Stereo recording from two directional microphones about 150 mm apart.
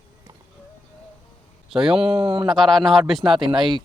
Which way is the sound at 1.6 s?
5° right (ahead or behind).